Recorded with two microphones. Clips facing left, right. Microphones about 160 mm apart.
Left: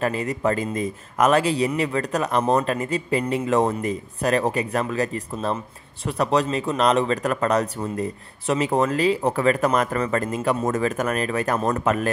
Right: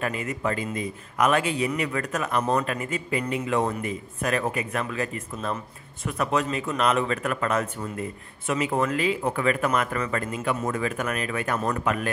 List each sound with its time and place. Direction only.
0.0 s speech: 35° left (ahead or behind)